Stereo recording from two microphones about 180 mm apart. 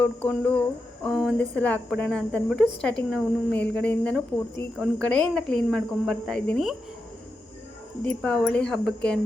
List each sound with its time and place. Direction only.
0.0 s a sound: 10° left (ahead or behind)
1.0 s speech: centre (ahead or behind)
8.0 s speech: 5° left (ahead or behind)